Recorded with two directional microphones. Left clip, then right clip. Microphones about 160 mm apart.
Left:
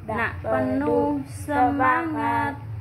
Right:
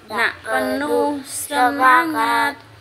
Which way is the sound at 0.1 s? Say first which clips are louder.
Right 5 dB; 35° right (ahead or behind).